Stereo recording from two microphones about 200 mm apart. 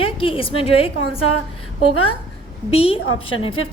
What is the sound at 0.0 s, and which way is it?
Speech, 25° left (ahead or behind).